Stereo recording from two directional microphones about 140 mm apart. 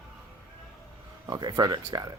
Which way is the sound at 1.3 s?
30° right (ahead or behind).